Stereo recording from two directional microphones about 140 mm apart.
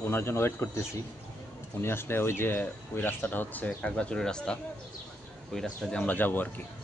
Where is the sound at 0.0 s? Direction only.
15° left (ahead or behind).